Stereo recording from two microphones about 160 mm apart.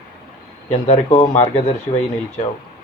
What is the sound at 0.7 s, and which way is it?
Speech, 35° left (ahead or behind).